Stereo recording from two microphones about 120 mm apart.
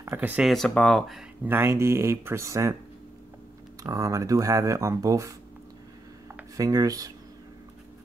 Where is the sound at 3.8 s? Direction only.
30° right (ahead or behind).